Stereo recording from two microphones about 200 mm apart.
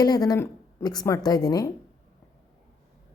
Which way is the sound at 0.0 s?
20° left (ahead or behind).